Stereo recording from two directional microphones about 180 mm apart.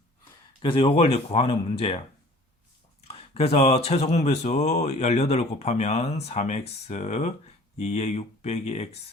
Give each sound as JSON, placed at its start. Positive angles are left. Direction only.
{"t": 0.6, "sound": "speech", "side_deg": 30}
{"t": 3.0, "sound": "speech", "side_deg": 35}